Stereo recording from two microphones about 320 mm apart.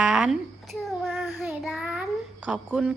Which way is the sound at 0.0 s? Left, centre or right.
Centre.